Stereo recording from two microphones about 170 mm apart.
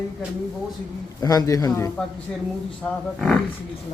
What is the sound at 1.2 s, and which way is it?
Speech, 20° left (ahead or behind).